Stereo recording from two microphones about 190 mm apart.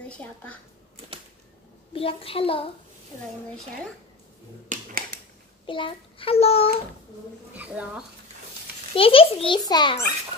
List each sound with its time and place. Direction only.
2.0 s a child's voice: 30° left (ahead or behind)
4.6 s a sound: 45° right (ahead or behind)
5.7 s a child's voice: 25° left (ahead or behind)
7.5 s a woman's voice: 5° right (ahead or behind)
8.9 s a child's voice: 30° left (ahead or behind)